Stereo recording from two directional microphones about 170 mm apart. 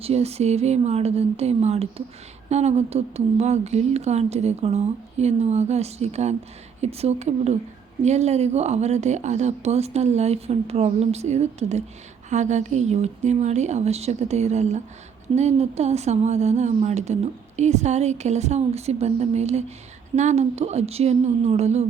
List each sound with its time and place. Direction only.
0.0 s speech: 35° right (ahead or behind)